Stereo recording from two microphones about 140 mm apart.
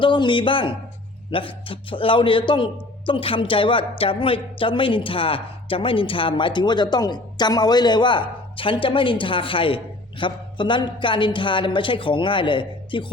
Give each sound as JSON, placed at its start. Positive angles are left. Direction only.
{"t": 0.0, "sound": "a woman's voice", "side_deg": 35}